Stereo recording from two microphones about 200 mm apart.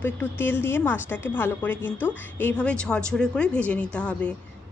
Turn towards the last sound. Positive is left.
turn(degrees=5)  # may be behind; listen again after turning